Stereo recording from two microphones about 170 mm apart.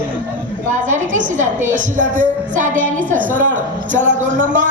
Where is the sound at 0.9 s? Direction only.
45° right (ahead or behind).